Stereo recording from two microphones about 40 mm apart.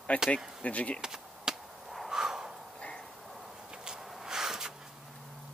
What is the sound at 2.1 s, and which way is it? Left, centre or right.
Snort, centre.